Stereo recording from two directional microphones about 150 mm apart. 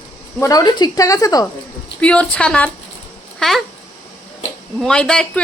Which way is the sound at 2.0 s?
10° left (ahead or behind).